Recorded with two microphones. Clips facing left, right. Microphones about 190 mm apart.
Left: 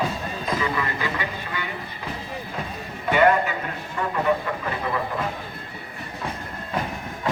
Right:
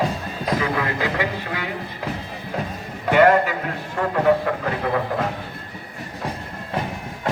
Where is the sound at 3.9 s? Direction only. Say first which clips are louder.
Right 5 dB; 70° right (ahead or behind).